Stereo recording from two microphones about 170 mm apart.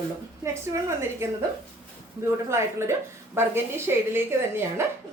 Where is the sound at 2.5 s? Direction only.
15° right (ahead or behind).